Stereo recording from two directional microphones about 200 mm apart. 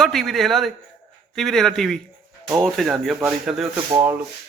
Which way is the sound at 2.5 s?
15° right (ahead or behind).